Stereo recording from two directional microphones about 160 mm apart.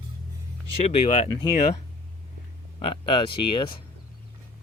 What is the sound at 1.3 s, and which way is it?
Speech, 25° left (ahead or behind).